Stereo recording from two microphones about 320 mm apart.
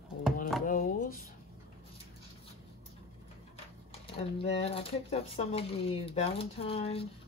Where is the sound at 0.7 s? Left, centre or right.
Left.